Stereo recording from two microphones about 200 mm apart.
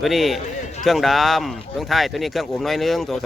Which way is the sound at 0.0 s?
Centre (ahead or behind).